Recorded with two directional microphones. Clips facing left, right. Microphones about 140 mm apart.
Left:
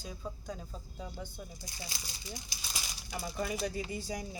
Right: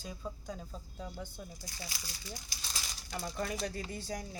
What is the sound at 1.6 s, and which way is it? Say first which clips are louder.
Speech: even; 20° left (ahead or behind).